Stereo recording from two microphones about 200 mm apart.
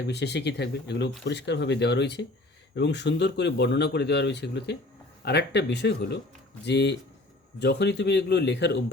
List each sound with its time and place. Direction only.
0.1 s speech: 60° left (ahead or behind)